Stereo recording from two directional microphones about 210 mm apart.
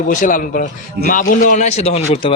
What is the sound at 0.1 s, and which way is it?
Speech, 40° left (ahead or behind).